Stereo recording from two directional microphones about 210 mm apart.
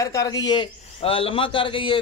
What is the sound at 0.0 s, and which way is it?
A man's voice, 15° left (ahead or behind).